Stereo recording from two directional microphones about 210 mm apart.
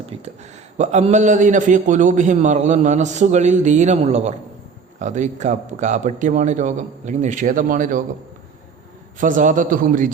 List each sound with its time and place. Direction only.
0.1 s a man's voice: 30° right (ahead or behind)
9.1 s a man's voice: 40° right (ahead or behind)